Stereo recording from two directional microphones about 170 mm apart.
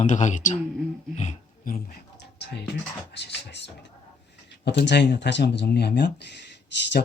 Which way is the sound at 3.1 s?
90° left.